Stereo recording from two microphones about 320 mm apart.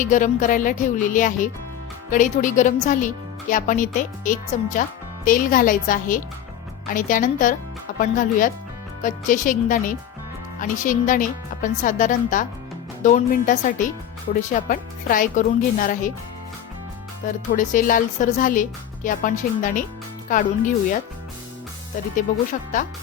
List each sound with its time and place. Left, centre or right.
0.0 s speech: left
17.5 s speech: left